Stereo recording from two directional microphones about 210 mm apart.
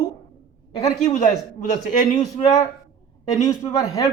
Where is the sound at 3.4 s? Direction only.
15° left (ahead or behind).